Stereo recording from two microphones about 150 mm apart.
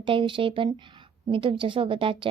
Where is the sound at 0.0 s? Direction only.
35° right (ahead or behind).